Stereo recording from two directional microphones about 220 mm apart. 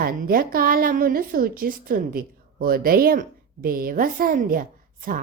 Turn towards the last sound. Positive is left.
turn(degrees=-40)  # may be behind; listen again after turning